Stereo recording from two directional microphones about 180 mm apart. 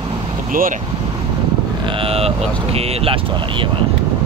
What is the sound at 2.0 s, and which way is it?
Speech, 35° right (ahead or behind).